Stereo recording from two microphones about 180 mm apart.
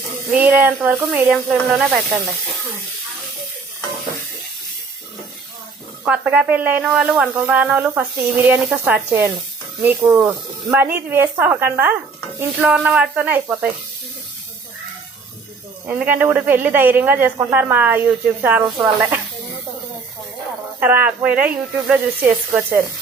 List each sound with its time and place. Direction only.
0.3 s speech: 10° right (ahead or behind)
6.1 s speech: 5° right (ahead or behind)
15.9 s speech: 10° right (ahead or behind)
20.7 s speech: 10° right (ahead or behind)